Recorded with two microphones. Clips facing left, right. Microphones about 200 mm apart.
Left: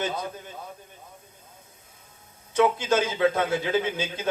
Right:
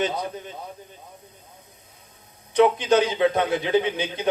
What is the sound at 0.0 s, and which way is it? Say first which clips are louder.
Speech: right 4 dB; 20° right (ahead or behind).